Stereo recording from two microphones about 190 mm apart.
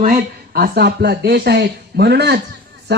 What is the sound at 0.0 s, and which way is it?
A man's voice, 50° right (ahead or behind).